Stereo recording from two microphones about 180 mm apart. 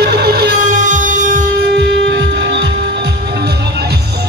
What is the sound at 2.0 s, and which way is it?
Music, 70° right (ahead or behind).